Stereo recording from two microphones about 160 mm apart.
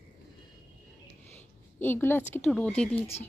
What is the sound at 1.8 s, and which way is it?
A woman's voice, 15° left (ahead or behind).